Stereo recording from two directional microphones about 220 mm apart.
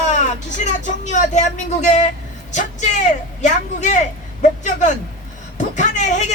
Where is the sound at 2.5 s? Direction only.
35° left (ahead or behind).